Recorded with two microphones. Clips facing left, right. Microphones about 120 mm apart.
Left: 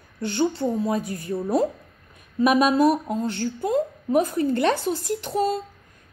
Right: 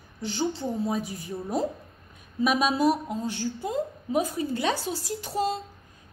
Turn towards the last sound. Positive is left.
turn(degrees=55)  # may be behind; listen again after turning